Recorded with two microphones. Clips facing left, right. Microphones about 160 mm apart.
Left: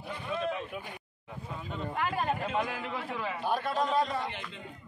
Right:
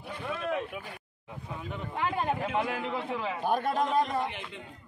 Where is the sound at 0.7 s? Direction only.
5° right (ahead or behind).